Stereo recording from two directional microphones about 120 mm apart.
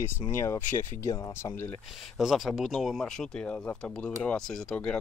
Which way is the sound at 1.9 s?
Centre (ahead or behind).